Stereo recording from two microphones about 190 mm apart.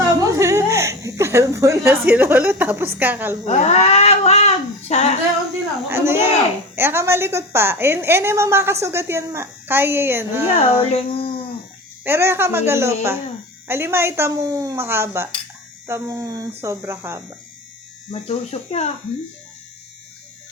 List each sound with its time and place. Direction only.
0.3 s a woman's voice: 15° right (ahead or behind)
3.4 s speech: 35° left (ahead or behind)
5.9 s a woman's voice: 10° right (ahead or behind)
10.5 s a sound: 30° left (ahead or behind)
12.0 s a woman's voice: 10° right (ahead or behind)
18.1 s speech: 35° left (ahead or behind)